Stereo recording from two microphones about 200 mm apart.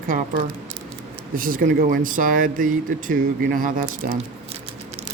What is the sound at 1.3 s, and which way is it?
Speech, 45° right (ahead or behind).